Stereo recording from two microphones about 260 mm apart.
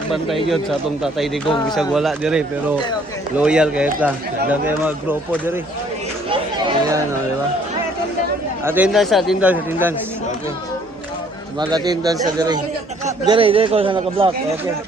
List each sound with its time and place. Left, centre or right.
0.1 s speech: centre
8.6 s speech: centre
11.7 s a man's voice: centre